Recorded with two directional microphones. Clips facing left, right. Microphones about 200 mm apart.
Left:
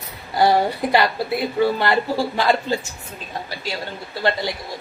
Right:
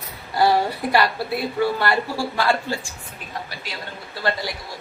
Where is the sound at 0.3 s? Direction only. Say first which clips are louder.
Left 2 dB; 15° left (ahead or behind).